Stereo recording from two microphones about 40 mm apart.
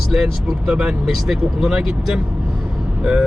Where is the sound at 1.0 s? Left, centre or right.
Centre.